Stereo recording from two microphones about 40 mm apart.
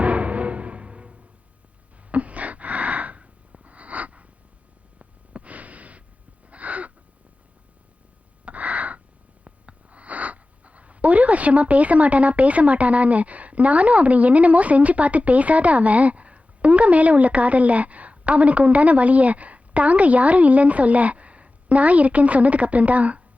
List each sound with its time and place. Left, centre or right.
0.0 s music: right
2.0 s gasp: right
4.9 s snort: right
6.5 s a sound: right
8.4 s a sound: right
9.4 s speech: right